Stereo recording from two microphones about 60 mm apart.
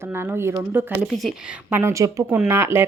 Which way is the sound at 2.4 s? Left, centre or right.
Right.